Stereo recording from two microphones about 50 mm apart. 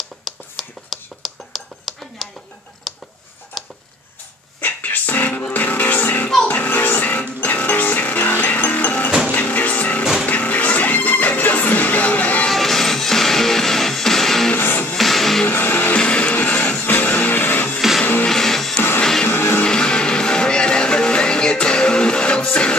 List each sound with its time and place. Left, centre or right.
0.2 s finger snapping: centre
2.9 s a sound: centre
4.6 s music: left
12.4 s music: centre
14.5 s music: left
15.0 s music: centre
15.4 s music: left
15.9 s music: left
18.3 s music: centre